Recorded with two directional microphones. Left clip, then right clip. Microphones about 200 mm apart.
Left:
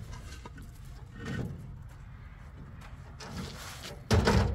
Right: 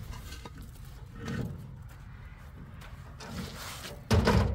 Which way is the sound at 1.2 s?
15° left (ahead or behind).